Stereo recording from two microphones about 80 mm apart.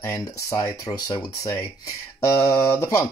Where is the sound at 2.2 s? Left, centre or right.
Left.